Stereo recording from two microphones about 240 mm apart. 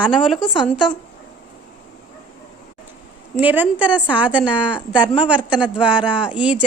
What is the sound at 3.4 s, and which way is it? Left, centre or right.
A woman's voice, centre.